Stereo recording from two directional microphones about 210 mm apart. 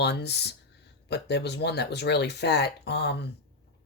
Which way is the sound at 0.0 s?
55° left (ahead or behind).